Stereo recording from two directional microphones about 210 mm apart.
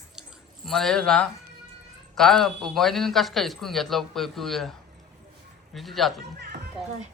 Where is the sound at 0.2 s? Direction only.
Centre (ahead or behind).